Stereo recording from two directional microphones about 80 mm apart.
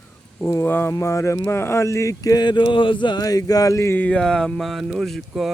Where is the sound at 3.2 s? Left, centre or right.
Left.